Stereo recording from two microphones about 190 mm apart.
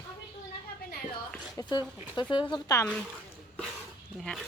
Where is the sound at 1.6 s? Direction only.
15° left (ahead or behind).